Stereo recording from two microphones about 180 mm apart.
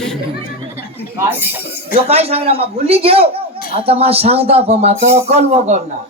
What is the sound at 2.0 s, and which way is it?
A woman's voice, 35° right (ahead or behind).